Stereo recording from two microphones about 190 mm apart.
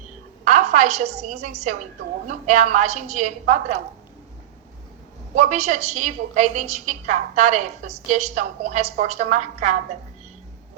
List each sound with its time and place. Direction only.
0.4 s a woman's voice: 40° right (ahead or behind)
5.3 s a woman's voice: 40° right (ahead or behind)